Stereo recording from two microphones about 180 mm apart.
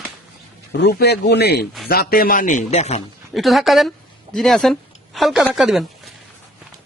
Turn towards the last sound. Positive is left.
turn(degrees=0)  # may be behind; listen again after turning